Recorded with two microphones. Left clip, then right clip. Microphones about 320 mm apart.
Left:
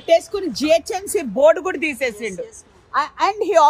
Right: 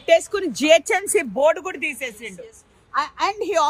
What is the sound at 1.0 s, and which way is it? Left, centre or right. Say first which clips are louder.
A woman's voice: left 3 dB; centre.